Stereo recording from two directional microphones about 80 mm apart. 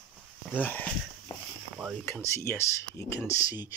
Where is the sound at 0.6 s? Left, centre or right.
Left.